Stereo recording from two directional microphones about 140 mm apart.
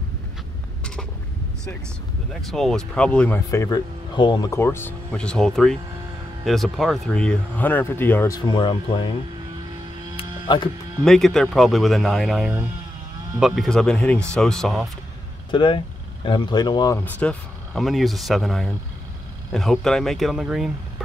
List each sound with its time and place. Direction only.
2.4 s speech: centre (ahead or behind)
3.4 s speech: 25° left (ahead or behind)
4.2 s speech: 35° left (ahead or behind)
4.5 s speech: 15° left (ahead or behind)
8.4 s speech: 30° left (ahead or behind)
10.1 s music: 35° left (ahead or behind)
11.1 s speech: centre (ahead or behind)
15.5 s speech: 35° left (ahead or behind)
16.9 s speech: 10° left (ahead or behind)